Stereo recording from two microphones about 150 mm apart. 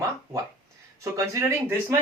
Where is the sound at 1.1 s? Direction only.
20° right (ahead or behind).